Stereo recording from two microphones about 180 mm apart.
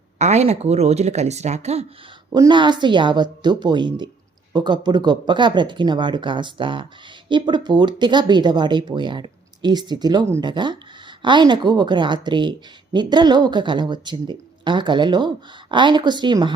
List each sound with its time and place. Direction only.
0.2 s speech: 40° right (ahead or behind)
2.3 s speech: 25° right (ahead or behind)